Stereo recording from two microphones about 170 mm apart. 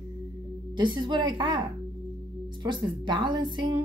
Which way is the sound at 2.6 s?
25° right (ahead or behind).